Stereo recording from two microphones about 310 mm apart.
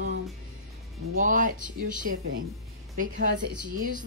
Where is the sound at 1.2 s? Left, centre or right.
Right.